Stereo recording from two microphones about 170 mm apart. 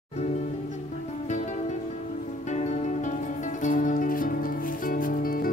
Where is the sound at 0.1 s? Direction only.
40° left (ahead or behind).